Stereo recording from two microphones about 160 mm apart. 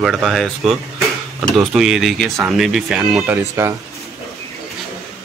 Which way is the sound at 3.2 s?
15° right (ahead or behind).